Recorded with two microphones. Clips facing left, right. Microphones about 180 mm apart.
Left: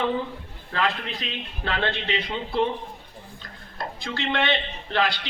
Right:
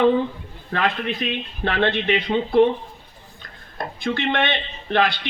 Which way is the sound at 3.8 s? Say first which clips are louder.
Right 6 dB; 55° right (ahead or behind).